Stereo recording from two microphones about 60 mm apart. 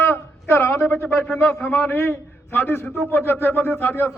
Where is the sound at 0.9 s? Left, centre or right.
Centre.